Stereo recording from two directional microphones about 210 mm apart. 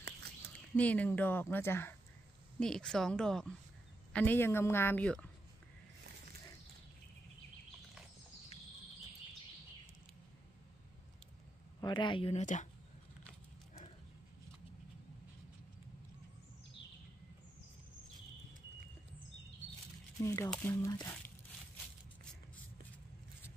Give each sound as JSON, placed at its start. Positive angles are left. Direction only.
{"t": 0.7, "sound": "a woman's voice", "side_deg": 5}
{"t": 11.8, "sound": "speech", "side_deg": 20}
{"t": 20.2, "sound": "speech", "side_deg": 15}